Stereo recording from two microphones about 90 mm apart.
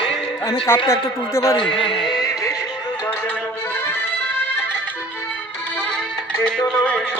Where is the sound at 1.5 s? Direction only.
75° left (ahead or behind).